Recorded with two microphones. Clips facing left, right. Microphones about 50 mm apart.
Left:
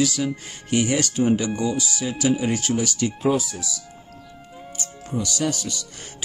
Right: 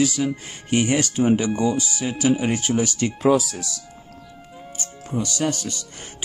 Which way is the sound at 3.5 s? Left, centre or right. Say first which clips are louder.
Even; right.